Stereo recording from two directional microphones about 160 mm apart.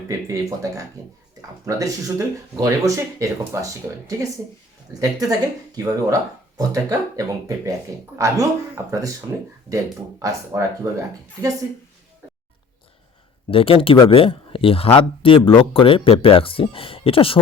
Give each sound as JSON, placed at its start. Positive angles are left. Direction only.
{"t": 0.1, "sound": "speech", "side_deg": -20}
{"t": 13.5, "sound": "speech", "side_deg": 35}